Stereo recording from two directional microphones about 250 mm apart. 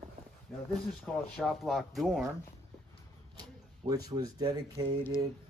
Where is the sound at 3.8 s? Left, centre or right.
Centre.